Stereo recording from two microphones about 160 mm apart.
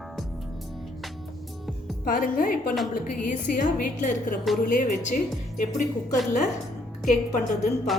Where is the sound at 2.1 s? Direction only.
60° left (ahead or behind).